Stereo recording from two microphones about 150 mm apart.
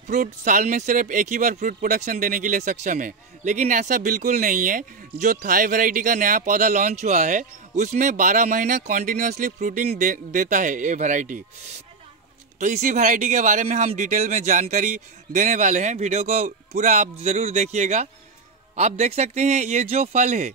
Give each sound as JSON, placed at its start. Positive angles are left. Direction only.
{"t": 0.1, "sound": "speech", "side_deg": -60}
{"t": 12.5, "sound": "speech", "side_deg": -55}